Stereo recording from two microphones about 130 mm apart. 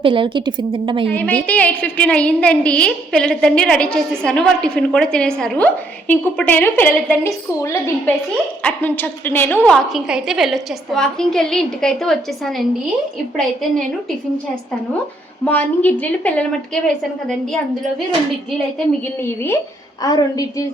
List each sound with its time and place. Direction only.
0.0 s a woman's voice: 40° right (ahead or behind)
1.1 s a woman's voice: 10° left (ahead or behind)
9.7 s a woman's voice: centre (ahead or behind)
15.4 s a woman's voice: 10° left (ahead or behind)
19.0 s a woman's voice: 20° left (ahead or behind)
20.0 s a woman's voice: 30° left (ahead or behind)